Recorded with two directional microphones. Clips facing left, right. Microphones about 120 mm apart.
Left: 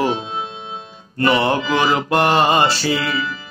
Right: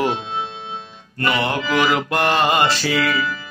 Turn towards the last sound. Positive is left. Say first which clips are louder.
# right 1 dB
turn(degrees=30)  # may be behind; listen again after turning